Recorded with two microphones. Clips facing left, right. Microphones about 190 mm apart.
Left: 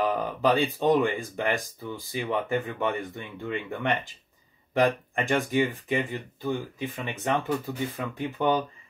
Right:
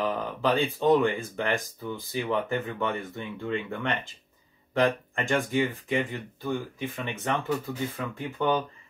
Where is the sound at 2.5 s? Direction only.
15° left (ahead or behind).